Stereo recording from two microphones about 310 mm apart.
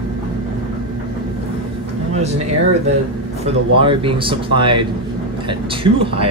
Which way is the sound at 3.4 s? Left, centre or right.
Centre.